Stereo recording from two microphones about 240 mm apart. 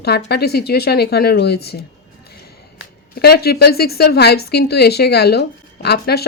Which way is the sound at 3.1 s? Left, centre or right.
Left.